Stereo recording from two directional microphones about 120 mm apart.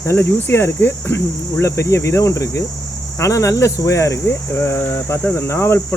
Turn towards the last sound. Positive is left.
turn(degrees=20)  # may be behind; listen again after turning